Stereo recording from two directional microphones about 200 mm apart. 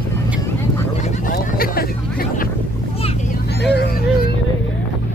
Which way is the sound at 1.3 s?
50° left (ahead or behind).